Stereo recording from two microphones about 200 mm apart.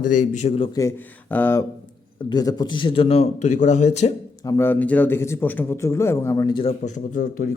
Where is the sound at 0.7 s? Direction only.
15° left (ahead or behind); by 4.1 s 35° left (ahead or behind).